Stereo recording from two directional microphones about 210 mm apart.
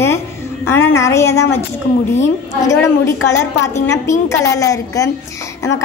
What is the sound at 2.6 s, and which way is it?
A woman's voice, 15° left (ahead or behind).